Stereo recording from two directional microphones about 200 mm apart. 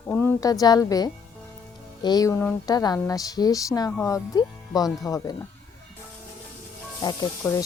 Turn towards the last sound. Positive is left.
turn(degrees=20)  # may be behind; listen again after turning